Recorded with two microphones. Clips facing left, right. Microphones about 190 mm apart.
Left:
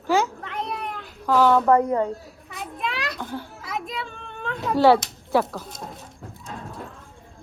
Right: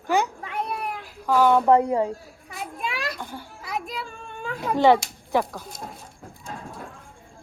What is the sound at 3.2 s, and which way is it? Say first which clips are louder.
Speech: left 4 dB; 10° right (ahead or behind).